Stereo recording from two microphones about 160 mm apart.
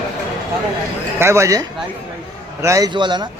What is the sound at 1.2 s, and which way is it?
A man's voice, 15° right (ahead or behind).